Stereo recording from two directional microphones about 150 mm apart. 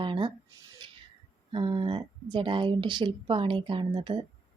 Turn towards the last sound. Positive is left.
turn(degrees=-35)  # may be behind; listen again after turning